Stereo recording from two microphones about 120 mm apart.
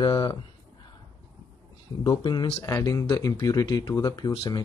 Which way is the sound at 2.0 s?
35° left (ahead or behind).